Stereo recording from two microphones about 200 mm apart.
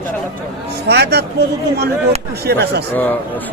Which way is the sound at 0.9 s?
55° right (ahead or behind).